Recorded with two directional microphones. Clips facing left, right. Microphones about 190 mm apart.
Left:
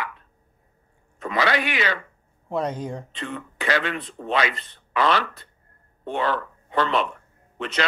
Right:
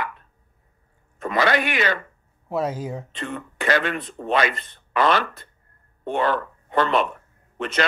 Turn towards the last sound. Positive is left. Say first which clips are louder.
# right 3 dB
turn(degrees=-50)  # may be behind; listen again after turning